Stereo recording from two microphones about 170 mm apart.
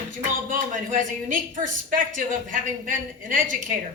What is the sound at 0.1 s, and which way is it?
A woman's voice, 50° right (ahead or behind).